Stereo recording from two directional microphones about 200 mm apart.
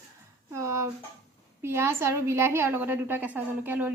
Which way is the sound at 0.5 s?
15° right (ahead or behind).